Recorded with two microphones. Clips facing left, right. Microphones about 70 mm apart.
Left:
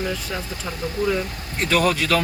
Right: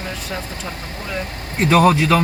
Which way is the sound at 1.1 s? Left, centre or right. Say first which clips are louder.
Even; right.